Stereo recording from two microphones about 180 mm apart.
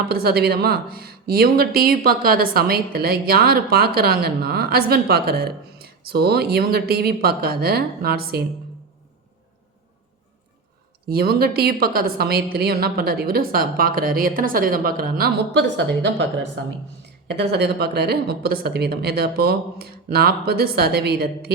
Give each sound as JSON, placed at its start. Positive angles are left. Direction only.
{"t": 0.1, "sound": "speech", "side_deg": -60}
{"t": 11.1, "sound": "speech", "side_deg": -60}
{"t": 17.2, "sound": "speech", "side_deg": -70}